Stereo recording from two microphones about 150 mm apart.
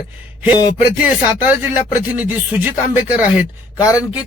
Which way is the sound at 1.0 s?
10° right (ahead or behind).